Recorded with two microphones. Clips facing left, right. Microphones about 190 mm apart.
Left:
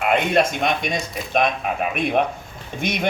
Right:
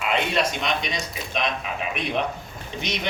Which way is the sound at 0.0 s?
50° left (ahead or behind).